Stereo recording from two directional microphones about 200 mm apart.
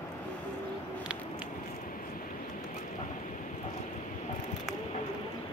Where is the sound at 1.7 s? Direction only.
45° left (ahead or behind).